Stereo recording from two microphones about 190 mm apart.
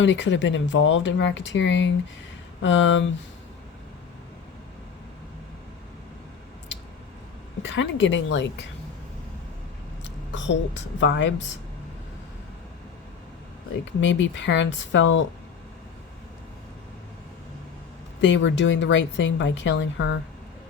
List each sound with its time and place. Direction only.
0.0 s a woman's voice: 75° left (ahead or behind)
7.6 s a woman's voice: 75° left (ahead or behind)
10.0 s a woman's voice: 70° left (ahead or behind)
14.0 s a woman's voice: 70° left (ahead or behind)
18.2 s a woman's voice: 70° left (ahead or behind)